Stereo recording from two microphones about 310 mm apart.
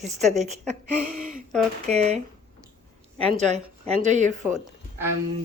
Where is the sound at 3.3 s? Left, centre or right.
Right.